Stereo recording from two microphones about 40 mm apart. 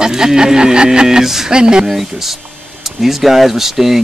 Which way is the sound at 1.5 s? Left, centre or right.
Centre.